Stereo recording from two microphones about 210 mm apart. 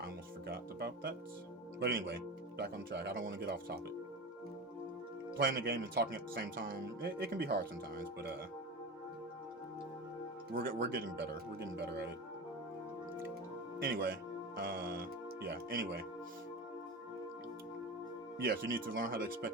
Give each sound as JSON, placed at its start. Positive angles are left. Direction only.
{"t": 0.0, "sound": "speech", "side_deg": -45}
{"t": 5.4, "sound": "speech", "side_deg": -45}
{"t": 10.5, "sound": "speech", "side_deg": -45}
{"t": 13.8, "sound": "speech", "side_deg": -45}
{"t": 18.4, "sound": "speech", "side_deg": -45}